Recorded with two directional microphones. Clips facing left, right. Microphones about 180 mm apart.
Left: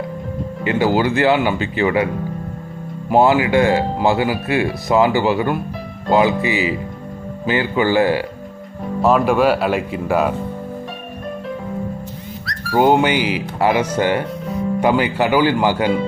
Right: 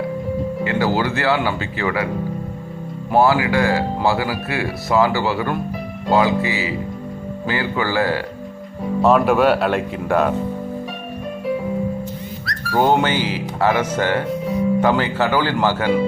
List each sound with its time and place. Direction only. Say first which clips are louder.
0.6 s speech: left 4 dB; 20° left (ahead or behind)
3.1 s speech: left 2 dB; 20° left (ahead or behind)
9.0 s speech: even; centre (ahead or behind)
12.7 s speech: left 3 dB; 15° left (ahead or behind)